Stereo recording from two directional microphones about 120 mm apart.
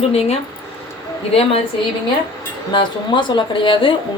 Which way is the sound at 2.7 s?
40° left (ahead or behind).